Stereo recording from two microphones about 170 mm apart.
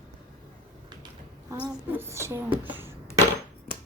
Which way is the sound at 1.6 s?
15° right (ahead or behind).